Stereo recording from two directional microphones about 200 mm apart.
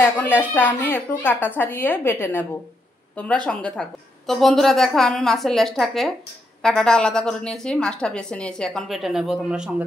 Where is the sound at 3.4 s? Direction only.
5° left (ahead or behind).